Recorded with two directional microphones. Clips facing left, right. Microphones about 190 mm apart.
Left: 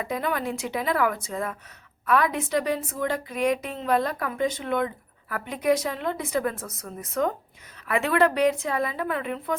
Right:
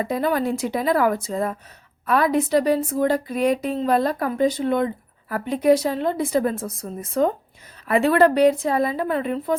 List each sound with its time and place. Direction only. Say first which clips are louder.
0.0 s speech: right 6 dB; 35° right (ahead or behind)